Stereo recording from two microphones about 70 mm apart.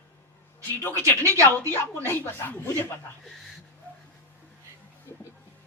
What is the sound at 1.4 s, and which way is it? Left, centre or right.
Speech, left.